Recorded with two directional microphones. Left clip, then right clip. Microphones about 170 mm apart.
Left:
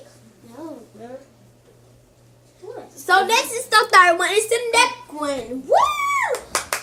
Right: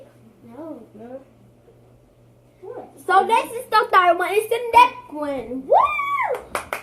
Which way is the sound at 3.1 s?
15° left (ahead or behind).